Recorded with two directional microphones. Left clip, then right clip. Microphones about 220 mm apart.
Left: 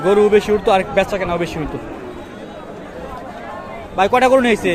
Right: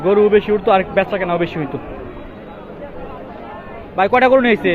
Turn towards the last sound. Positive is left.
turn(degrees=10)  # may be behind; listen again after turning